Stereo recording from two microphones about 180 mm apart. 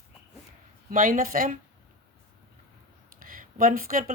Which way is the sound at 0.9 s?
50° right (ahead or behind).